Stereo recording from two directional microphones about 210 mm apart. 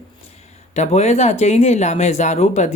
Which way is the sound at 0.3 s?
30° left (ahead or behind).